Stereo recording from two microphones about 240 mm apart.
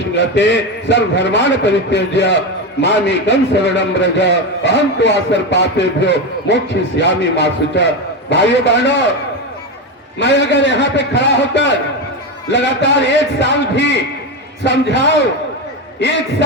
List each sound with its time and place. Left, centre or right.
0.2 s a man's voice: left
10.2 s a man's voice: left